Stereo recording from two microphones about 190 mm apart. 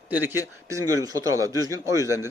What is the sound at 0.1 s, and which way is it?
Speech, 10° right (ahead or behind).